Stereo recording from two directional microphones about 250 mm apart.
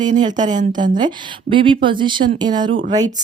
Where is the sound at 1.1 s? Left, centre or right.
Centre.